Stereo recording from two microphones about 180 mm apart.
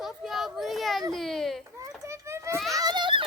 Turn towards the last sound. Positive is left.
turn(degrees=-25)  # may be behind; listen again after turning